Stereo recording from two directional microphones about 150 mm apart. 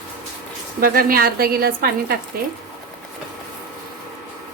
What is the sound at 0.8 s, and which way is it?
A woman's voice, 80° right.